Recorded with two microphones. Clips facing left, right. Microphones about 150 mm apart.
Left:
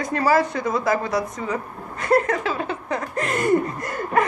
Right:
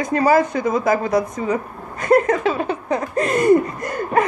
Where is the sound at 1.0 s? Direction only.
45° right (ahead or behind).